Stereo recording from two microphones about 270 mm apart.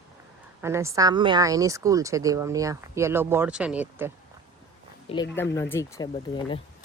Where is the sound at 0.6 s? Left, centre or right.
Centre.